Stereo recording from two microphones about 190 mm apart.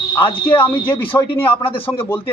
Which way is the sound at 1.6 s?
30° left (ahead or behind).